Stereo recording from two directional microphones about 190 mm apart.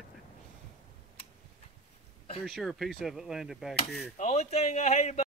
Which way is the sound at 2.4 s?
Centre (ahead or behind).